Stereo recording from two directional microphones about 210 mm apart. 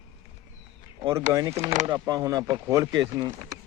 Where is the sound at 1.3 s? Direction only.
15° right (ahead or behind).